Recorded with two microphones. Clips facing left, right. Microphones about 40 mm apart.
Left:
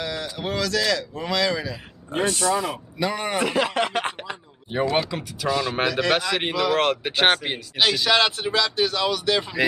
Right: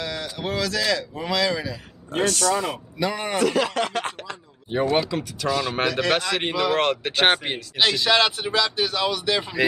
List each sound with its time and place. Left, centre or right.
0.0 s speech: centre
2.2 s speech: centre
2.5 s speech: centre
3.3 s speech: centre
4.9 s speech: centre